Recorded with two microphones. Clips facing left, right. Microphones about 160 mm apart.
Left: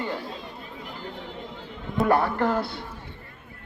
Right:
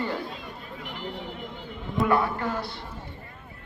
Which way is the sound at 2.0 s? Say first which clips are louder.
Left 3 dB; 40° left (ahead or behind).